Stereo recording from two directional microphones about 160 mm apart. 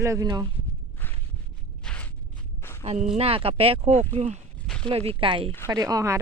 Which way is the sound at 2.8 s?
45° right (ahead or behind).